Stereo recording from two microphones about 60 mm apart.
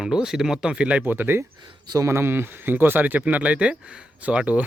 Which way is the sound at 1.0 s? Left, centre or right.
Right.